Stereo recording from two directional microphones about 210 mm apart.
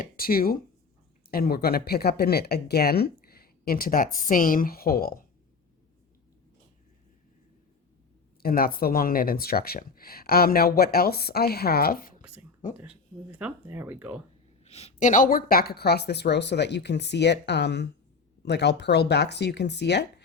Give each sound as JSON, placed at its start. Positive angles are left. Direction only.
{"t": 0.0, "sound": "speech", "side_deg": 45}
{"t": 8.4, "sound": "speech", "side_deg": 45}
{"t": 12.7, "sound": "speech", "side_deg": -5}
{"t": 14.6, "sound": "speech", "side_deg": 30}